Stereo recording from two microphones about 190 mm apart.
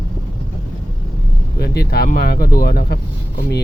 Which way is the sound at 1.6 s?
55° left (ahead or behind).